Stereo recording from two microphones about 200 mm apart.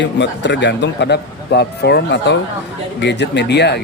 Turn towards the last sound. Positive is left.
turn(degrees=55)  # may be behind; listen again after turning